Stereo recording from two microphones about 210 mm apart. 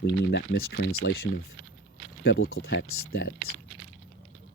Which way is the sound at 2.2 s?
65° left (ahead or behind).